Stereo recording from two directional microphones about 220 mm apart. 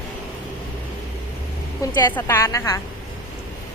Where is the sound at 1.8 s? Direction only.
15° left (ahead or behind).